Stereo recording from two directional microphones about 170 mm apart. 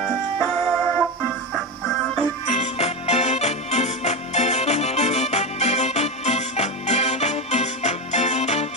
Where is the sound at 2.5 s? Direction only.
40° left (ahead or behind).